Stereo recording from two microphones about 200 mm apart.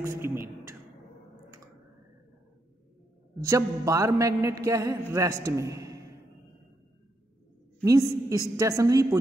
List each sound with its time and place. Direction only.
0.0 s speech: 15° right (ahead or behind)
3.3 s speech: 15° right (ahead or behind)
7.8 s speech: 15° right (ahead or behind)